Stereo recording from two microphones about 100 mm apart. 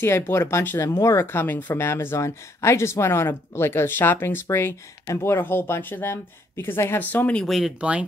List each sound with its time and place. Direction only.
0.0 s speech: 25° left (ahead or behind)
7.4 s speech: centre (ahead or behind)